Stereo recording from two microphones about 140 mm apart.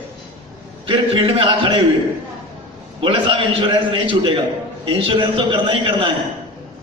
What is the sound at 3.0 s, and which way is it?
A man's voice, 40° right (ahead or behind).